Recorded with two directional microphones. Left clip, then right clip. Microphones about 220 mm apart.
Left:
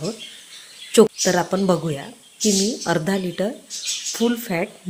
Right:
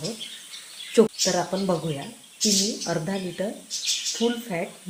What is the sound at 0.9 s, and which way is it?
Speech, 45° left (ahead or behind).